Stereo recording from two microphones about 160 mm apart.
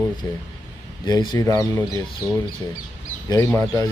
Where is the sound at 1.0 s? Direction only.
25° left (ahead or behind).